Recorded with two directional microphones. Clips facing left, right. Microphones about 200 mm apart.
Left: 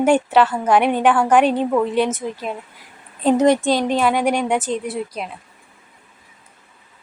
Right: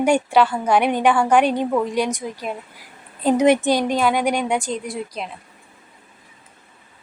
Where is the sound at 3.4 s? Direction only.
20° right (ahead or behind).